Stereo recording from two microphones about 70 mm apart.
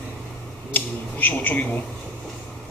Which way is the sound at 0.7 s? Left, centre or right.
Left.